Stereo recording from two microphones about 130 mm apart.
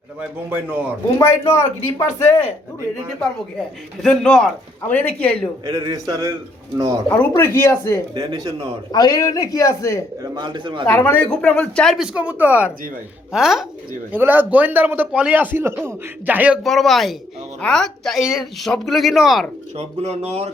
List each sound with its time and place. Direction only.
0.2 s a man's voice: 10° right (ahead or behind)
1.2 s a man's voice: 20° left (ahead or behind)
4.0 s a man's voice: 5° left (ahead or behind)
5.6 s a man's voice: 30° right (ahead or behind)
7.3 s a man's voice: 20° left (ahead or behind)
8.1 s a man's voice: 30° right (ahead or behind)
8.9 s a man's voice: 30° left (ahead or behind)
10.3 s a man's voice: 35° right (ahead or behind)
10.8 s a man's voice: 15° left (ahead or behind)
11.9 s a man's voice: 10° right (ahead or behind)
14.1 s a man's voice: 15° right (ahead or behind)
16.6 s speech: centre (ahead or behind)
19.7 s speech: 55° right (ahead or behind)